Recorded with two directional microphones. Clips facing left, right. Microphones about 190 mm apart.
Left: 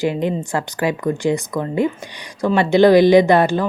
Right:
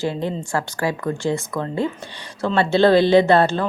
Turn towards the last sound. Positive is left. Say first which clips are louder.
# left 2 dB
turn(degrees=15)  # may be behind; listen again after turning